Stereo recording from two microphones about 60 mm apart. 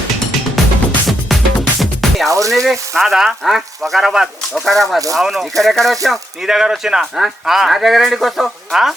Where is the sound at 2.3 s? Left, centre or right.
Right.